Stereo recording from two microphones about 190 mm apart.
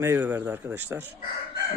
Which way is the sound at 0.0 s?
10° right (ahead or behind).